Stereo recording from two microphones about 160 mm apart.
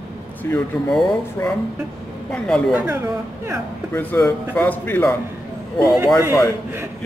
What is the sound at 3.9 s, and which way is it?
A man's voice, 15° left (ahead or behind).